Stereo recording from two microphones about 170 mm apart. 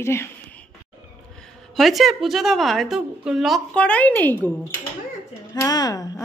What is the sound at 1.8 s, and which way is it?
A woman's voice, centre (ahead or behind).